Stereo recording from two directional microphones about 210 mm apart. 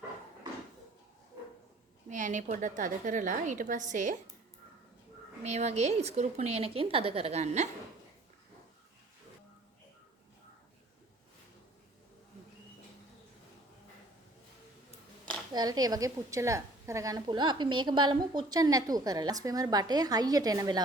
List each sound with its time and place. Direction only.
2.0 s speech: 35° right (ahead or behind)
5.4 s speech: 30° right (ahead or behind)
15.5 s a woman's voice: 20° right (ahead or behind)